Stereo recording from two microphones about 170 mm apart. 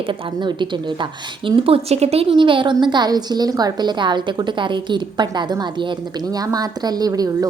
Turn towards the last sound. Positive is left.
turn(degrees=-20)  # may be behind; listen again after turning